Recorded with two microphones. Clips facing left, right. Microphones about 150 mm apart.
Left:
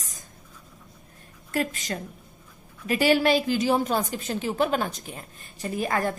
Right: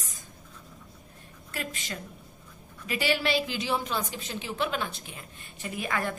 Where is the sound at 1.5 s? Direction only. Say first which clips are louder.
Left 9 dB; 45° left (ahead or behind).